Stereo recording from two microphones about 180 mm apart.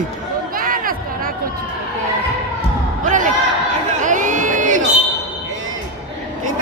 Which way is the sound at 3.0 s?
45° right (ahead or behind).